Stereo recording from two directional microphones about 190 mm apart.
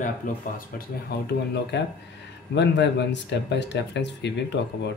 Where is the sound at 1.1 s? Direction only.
55° left (ahead or behind).